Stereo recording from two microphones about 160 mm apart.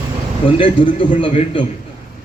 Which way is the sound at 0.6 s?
35° left (ahead or behind).